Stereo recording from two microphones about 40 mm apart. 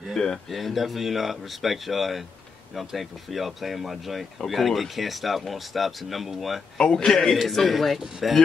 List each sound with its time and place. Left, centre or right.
0.5 s speech: centre
6.8 s a man's voice: left
7.1 s speech: centre